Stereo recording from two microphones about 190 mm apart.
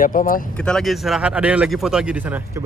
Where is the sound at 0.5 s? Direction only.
5° left (ahead or behind).